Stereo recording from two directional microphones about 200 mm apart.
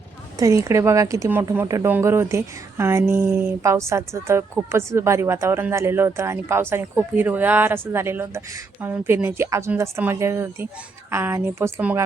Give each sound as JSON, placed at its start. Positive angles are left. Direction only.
{"t": 0.3, "sound": "speech", "side_deg": -15}